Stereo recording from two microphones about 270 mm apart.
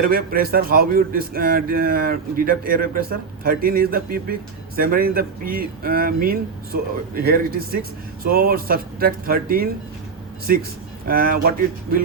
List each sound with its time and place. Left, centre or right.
0.0 s speech: right